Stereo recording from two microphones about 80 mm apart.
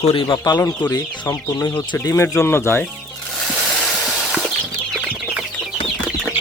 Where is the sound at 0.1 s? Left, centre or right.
Left.